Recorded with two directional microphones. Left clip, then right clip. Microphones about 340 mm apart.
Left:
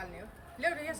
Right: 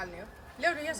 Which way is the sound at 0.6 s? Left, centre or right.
Centre.